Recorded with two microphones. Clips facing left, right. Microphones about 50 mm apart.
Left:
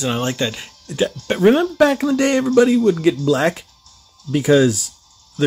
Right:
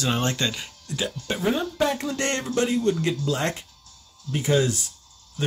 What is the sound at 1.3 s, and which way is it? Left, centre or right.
Speech, left.